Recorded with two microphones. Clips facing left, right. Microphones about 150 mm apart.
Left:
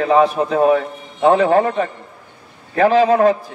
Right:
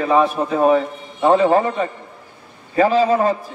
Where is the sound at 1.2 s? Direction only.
65° left (ahead or behind).